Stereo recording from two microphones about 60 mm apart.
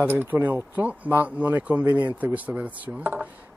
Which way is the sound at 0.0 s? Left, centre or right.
Right.